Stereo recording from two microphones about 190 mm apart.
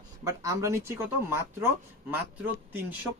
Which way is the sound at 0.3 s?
15° right (ahead or behind).